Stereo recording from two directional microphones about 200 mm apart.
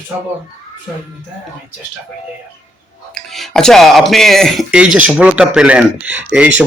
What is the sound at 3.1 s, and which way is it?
Speech, centre (ahead or behind).